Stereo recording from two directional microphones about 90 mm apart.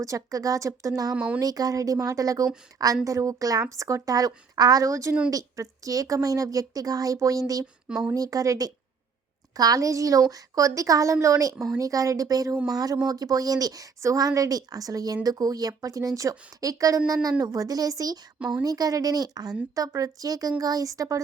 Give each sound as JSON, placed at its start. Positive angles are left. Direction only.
{"t": 0.0, "sound": "speech", "side_deg": -35}
{"t": 1.1, "sound": "speech", "side_deg": -15}
{"t": 1.4, "sound": "speech", "side_deg": -45}
{"t": 7.9, "sound": "speech", "side_deg": -10}
{"t": 8.1, "sound": "speech", "side_deg": -40}
{"t": 18.3, "sound": "speech", "side_deg": -10}
{"t": 18.6, "sound": "speech", "side_deg": -45}